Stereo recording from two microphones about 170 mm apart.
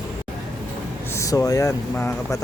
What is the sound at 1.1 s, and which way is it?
Speech, 20° left (ahead or behind).